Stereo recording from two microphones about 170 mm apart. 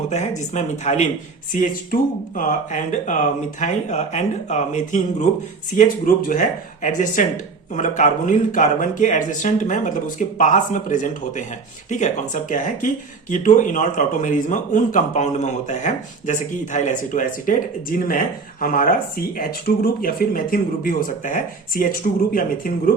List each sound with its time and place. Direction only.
0.1 s speech: 45° left (ahead or behind)